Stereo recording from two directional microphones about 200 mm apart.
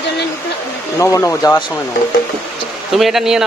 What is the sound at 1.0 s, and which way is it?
Speech, 15° left (ahead or behind).